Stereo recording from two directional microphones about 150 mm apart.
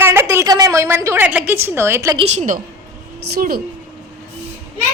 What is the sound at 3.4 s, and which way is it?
Speech, 90° right.